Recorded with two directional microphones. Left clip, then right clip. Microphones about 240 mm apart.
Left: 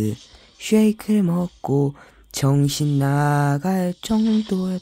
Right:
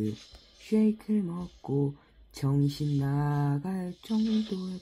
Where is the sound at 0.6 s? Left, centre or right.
Left.